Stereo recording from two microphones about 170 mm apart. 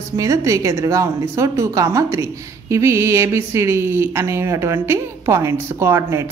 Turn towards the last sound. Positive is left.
turn(degrees=-15)  # may be behind; listen again after turning